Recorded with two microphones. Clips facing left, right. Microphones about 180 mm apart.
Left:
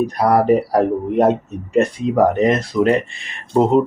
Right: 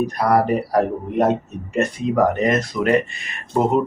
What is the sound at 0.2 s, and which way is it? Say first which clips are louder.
Speech: left 4 dB; 25° left (ahead or behind).